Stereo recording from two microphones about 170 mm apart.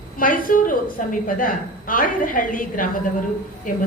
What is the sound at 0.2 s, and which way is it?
A woman's voice, 55° left (ahead or behind).